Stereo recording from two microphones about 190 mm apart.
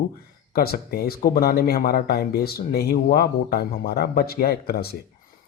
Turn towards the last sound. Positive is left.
turn(degrees=55)  # may be behind; listen again after turning